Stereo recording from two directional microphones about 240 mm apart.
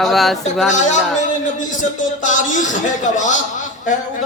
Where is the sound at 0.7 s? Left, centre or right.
Left.